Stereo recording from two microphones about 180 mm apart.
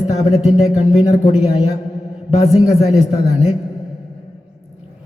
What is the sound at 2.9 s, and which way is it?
Speech, 35° left (ahead or behind).